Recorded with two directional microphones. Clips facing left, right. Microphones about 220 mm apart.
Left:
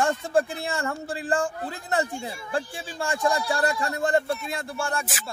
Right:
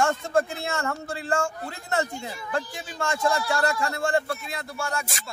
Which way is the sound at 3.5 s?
15° left (ahead or behind).